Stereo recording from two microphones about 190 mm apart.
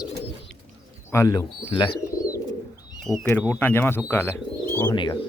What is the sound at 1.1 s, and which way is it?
Speech, 20° left (ahead or behind).